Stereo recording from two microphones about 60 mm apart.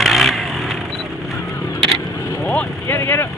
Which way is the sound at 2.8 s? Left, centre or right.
Left.